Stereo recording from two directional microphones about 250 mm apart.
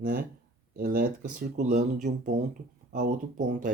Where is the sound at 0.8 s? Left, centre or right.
Right.